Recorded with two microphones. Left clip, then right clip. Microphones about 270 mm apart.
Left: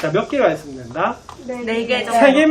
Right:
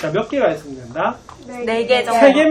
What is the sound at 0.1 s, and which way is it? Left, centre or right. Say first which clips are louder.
A man's voice: even; centre.